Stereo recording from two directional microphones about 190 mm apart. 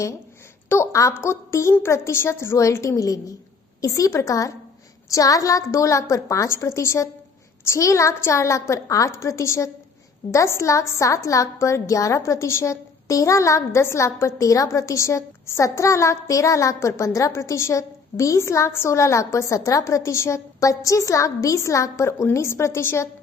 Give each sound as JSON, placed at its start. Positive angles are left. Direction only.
{"t": 0.7, "sound": "a woman's voice", "side_deg": 15}